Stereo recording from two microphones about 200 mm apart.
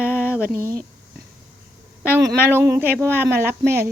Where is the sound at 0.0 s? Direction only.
10° left (ahead or behind).